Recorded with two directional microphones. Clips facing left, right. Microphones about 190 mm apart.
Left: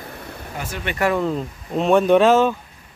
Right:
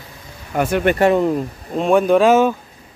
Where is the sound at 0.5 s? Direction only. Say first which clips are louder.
Right 13 dB; 60° right (ahead or behind).